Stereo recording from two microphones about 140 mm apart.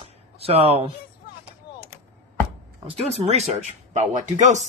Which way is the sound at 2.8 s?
50° right (ahead or behind).